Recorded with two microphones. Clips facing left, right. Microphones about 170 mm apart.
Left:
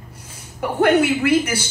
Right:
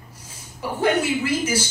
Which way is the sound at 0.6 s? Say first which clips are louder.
Left 5 dB; 60° left (ahead or behind).